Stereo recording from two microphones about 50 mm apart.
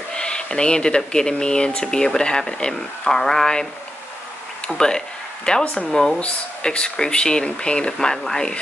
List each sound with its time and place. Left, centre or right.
0.1 s speech: centre
4.6 s speech: centre